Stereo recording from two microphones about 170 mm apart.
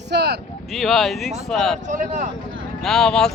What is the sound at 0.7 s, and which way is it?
Speech, centre (ahead or behind).